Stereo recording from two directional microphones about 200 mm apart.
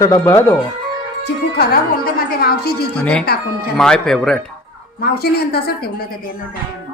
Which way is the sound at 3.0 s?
5° left (ahead or behind).